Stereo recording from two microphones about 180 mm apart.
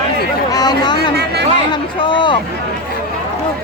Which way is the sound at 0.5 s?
20° left (ahead or behind).